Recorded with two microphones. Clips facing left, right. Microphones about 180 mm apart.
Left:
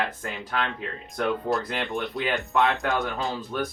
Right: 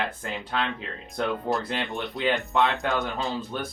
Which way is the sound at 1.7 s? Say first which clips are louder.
Left 2 dB; centre (ahead or behind).